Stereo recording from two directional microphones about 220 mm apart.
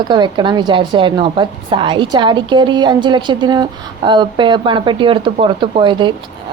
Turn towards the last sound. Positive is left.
turn(degrees=-20)  # may be behind; listen again after turning